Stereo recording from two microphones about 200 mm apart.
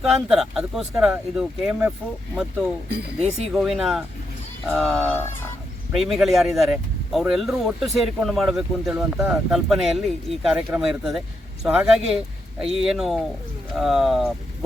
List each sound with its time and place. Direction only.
0.0 s speech: centre (ahead or behind)
3.5 s speech: centre (ahead or behind)